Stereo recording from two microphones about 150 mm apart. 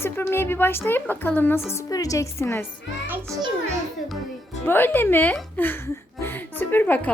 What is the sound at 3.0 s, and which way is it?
Speech, 15° right (ahead or behind).